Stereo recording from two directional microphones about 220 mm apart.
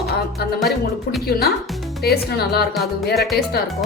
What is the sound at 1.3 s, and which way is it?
Speech, 45° left (ahead or behind).